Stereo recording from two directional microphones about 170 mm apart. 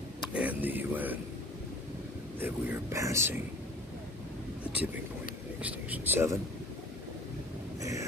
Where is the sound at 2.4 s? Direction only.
15° right (ahead or behind).